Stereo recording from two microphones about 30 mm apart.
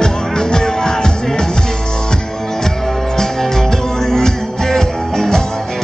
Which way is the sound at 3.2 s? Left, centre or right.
Centre.